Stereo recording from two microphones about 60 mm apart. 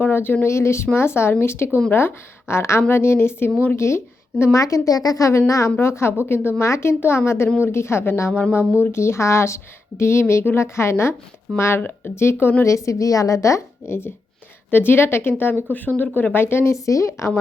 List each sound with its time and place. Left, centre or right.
0.0 s a sound: left
0.4 s a woman's voice: left
4.5 s a woman's voice: left
5.8 s a woman's voice: left
11.8 s speech: left
12.1 s a woman's voice: left
12.6 s a woman's voice: left
14.7 s a woman's voice: left
16.3 s a woman's voice: left